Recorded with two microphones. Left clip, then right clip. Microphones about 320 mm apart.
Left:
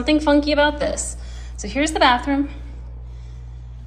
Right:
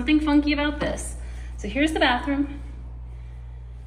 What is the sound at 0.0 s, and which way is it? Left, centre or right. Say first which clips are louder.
Speech: left 4 dB; centre.